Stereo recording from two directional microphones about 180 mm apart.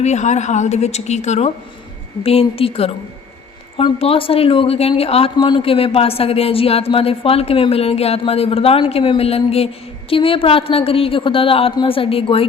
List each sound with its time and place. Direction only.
0.0 s speech: 40° left (ahead or behind)